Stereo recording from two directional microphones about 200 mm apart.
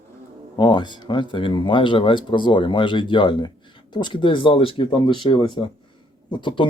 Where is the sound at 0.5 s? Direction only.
20° left (ahead or behind).